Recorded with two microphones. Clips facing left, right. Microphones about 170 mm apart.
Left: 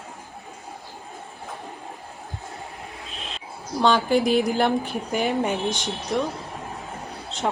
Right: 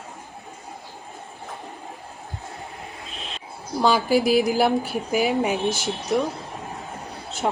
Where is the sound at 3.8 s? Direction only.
5° right (ahead or behind).